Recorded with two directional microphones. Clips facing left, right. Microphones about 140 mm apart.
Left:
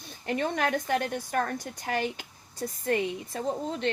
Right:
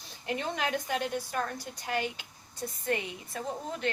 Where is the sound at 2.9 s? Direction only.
35° left (ahead or behind).